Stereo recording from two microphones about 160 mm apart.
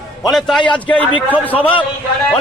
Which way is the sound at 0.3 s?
Centre (ahead or behind).